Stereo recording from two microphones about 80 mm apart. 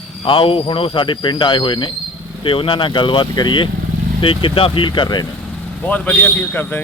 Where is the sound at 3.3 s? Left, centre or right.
Left.